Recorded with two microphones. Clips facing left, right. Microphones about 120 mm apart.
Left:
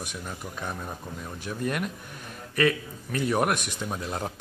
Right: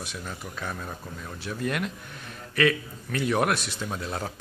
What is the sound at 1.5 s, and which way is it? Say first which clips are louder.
Speech: even; 10° left (ahead or behind).